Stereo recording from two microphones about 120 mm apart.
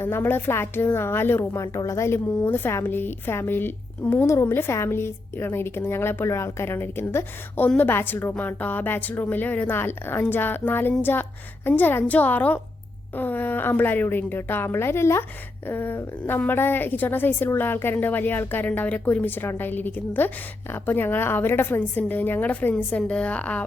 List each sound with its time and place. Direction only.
0.0 s a woman's voice: 20° left (ahead or behind)